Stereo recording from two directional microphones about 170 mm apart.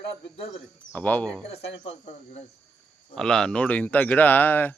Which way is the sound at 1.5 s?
35° left (ahead or behind).